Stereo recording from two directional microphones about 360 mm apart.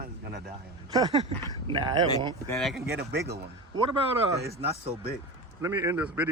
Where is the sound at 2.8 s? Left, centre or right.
Right.